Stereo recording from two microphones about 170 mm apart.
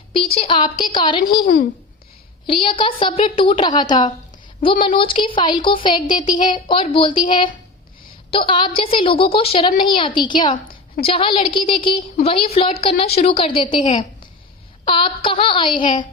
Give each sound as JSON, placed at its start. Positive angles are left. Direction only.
{"t": 0.1, "sound": "a woman's voice", "side_deg": 35}
{"t": 2.5, "sound": "a woman's voice", "side_deg": 30}
{"t": 14.8, "sound": "speech", "side_deg": 30}